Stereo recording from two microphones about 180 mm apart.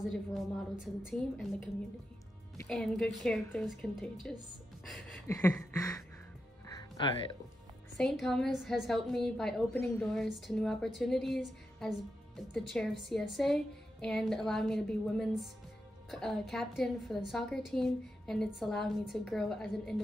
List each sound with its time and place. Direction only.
0.1 s a woman's voice: centre (ahead or behind)
2.7 s a woman's voice: 5° left (ahead or behind)
4.8 s music: 5° left (ahead or behind)
5.3 s a sound: 15° left (ahead or behind)
6.7 s music: 20° left (ahead or behind)
8.0 s a woman's voice: 5° left (ahead or behind)